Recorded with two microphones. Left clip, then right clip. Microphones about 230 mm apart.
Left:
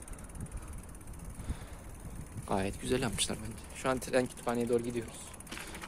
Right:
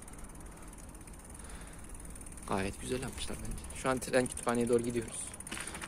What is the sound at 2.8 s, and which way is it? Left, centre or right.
Speech, left.